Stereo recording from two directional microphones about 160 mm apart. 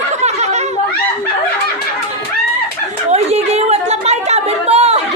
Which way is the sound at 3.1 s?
40° right (ahead or behind).